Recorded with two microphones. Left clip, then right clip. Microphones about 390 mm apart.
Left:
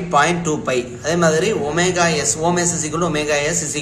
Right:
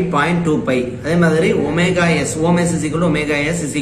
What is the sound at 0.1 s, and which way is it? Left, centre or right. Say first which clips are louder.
Speech: left 4 dB; left.